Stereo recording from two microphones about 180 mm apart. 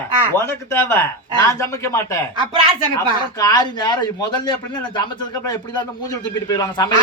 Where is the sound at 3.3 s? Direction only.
20° left (ahead or behind).